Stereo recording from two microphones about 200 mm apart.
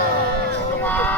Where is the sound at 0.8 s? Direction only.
10° left (ahead or behind).